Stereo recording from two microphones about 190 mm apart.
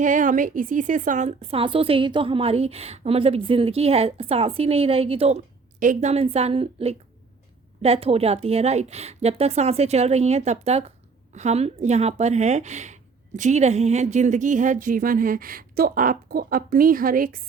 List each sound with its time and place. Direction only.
0.0 s a woman's voice: 45° right (ahead or behind)